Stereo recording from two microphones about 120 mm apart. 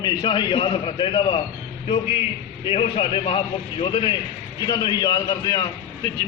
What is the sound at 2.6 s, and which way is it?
A man's voice, 50° left (ahead or behind).